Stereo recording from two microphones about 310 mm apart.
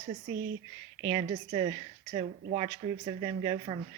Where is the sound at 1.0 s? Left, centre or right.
Centre.